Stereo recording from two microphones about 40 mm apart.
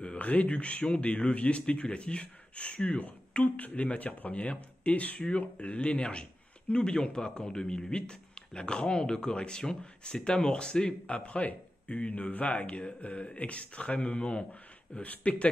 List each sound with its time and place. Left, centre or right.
0.0 s speech: left
3.0 s speech: left